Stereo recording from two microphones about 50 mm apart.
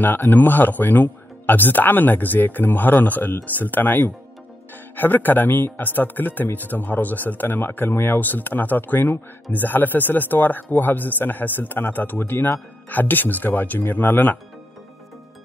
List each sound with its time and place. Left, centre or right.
0.3 s speech: left